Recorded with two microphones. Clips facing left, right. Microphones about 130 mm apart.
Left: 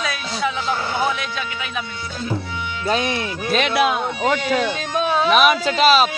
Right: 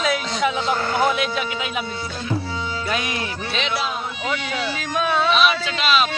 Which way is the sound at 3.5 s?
55° left (ahead or behind).